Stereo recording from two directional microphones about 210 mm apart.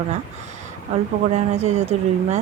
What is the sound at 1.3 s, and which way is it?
Speech, 30° right (ahead or behind).